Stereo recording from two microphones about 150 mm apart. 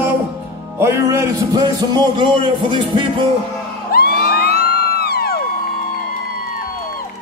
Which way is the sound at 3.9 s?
90° left.